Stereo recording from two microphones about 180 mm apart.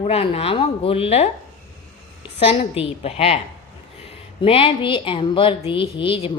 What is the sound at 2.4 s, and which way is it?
Speech, 30° left (ahead or behind).